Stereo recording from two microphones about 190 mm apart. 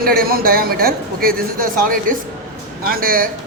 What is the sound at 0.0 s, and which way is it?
A man's voice, 50° right (ahead or behind).